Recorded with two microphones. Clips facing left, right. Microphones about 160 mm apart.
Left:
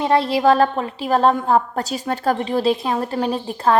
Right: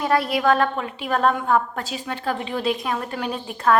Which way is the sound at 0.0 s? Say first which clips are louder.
Left 4 dB; 25° left (ahead or behind).